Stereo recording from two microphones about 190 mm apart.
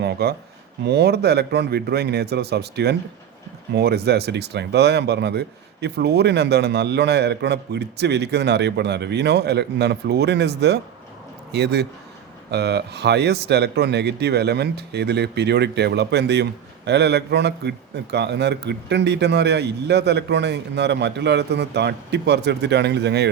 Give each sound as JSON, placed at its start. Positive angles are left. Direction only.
{"t": 0.0, "sound": "speech", "side_deg": -60}